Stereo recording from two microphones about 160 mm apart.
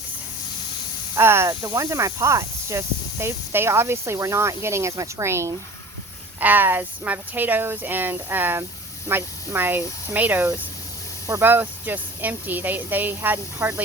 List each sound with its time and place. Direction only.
1.1 s speech: 15° right (ahead or behind)